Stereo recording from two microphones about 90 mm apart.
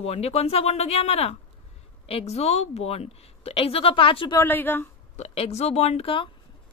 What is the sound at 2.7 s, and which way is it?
A woman's voice, 90° left.